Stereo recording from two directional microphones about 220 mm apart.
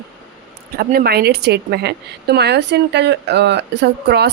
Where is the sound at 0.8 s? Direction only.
45° right (ahead or behind).